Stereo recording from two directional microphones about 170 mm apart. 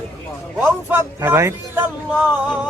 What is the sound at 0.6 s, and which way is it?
Speech, 10° right (ahead or behind).